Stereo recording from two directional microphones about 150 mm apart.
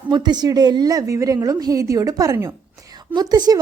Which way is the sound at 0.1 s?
30° right (ahead or behind).